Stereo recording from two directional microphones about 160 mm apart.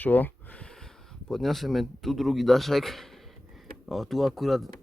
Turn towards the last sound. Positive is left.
turn(degrees=0)  # may be behind; listen again after turning